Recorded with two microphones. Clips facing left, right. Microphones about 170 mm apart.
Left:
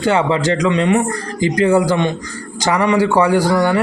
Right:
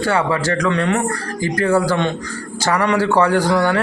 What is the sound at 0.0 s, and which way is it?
A man's voice, 20° left (ahead or behind).